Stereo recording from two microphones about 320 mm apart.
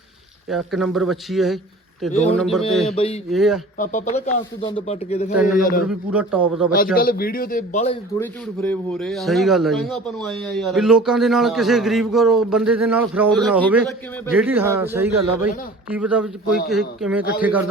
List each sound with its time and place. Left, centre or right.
0.5 s a man's voice: centre
2.8 s a man's voice: centre
3.2 s a man's voice: centre
3.8 s a man's voice: left
5.3 s a man's voice: centre
5.5 s a man's voice: left
5.9 s a man's voice: centre
6.7 s a man's voice: left
8.2 s a man's voice: centre